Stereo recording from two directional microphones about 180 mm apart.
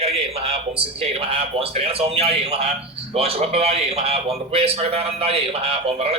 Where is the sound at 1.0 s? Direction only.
30° right (ahead or behind).